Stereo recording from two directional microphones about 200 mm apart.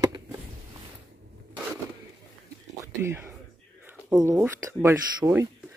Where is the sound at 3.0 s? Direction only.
10° right (ahead or behind).